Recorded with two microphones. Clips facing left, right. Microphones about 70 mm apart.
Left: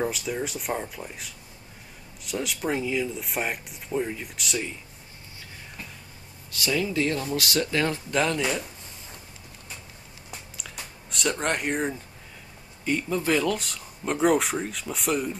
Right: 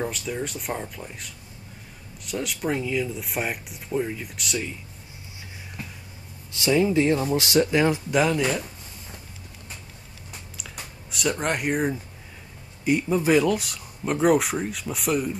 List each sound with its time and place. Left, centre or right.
0.0 s speech: centre
6.5 s speech: right; by 8.6 s centre
10.6 s a sound: centre
12.8 s speech: centre